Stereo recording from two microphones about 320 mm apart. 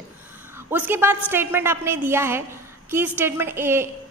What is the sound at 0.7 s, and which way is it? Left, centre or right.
A woman's voice, centre.